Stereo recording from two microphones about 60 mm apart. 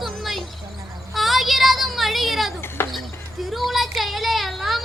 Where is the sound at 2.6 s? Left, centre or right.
Left.